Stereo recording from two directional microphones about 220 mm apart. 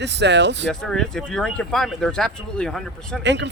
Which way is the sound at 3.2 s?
55° right (ahead or behind).